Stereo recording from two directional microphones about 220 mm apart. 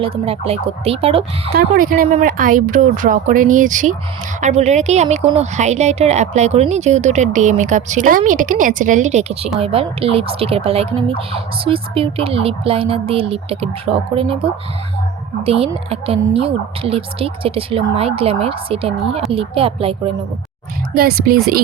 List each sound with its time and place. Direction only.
0.0 s speech: 25° right (ahead or behind)
1.7 s speech: 40° right (ahead or behind)
15.4 s speech: 25° right (ahead or behind)
20.9 s speech: 45° right (ahead or behind)